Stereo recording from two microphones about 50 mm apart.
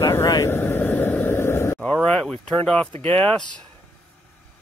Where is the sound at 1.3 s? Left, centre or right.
Left.